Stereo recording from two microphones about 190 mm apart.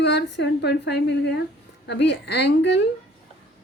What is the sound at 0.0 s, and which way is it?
A woman's voice, 65° left (ahead or behind).